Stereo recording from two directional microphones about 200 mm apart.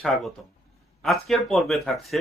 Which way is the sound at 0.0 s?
Centre (ahead or behind).